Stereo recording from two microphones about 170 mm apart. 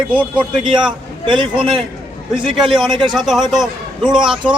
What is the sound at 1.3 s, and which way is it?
Speech, 30° right (ahead or behind).